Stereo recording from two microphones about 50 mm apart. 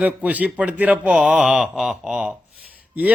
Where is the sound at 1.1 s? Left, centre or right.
Centre.